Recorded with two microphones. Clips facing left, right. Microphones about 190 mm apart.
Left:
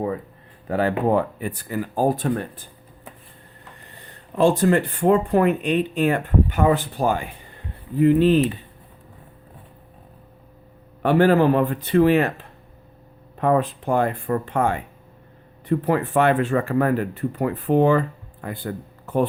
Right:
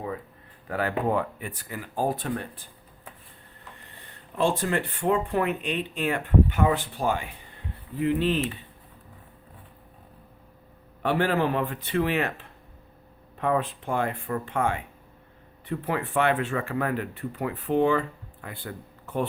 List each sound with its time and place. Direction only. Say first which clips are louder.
0.7 s speech: left 6 dB; 30° left (ahead or behind); by 2.5 s 45° left (ahead or behind)
4.4 s speech: left 8 dB; 40° left (ahead or behind)
11.0 s speech: left 8 dB; 45° left (ahead or behind)
13.4 s speech: left 6 dB; 40° left (ahead or behind)